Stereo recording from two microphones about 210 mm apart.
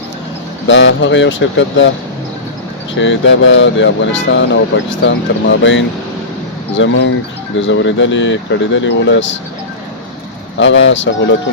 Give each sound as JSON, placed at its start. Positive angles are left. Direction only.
{"t": 0.7, "sound": "speech", "side_deg": 60}
{"t": 3.0, "sound": "speech", "side_deg": 65}
{"t": 10.6, "sound": "speech", "side_deg": 65}